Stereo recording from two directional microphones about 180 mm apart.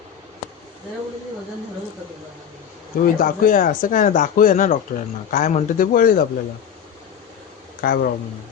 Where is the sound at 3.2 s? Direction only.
50° left (ahead or behind).